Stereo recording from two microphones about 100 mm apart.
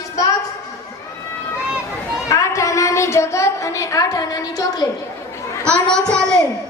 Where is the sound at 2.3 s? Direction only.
30° left (ahead or behind).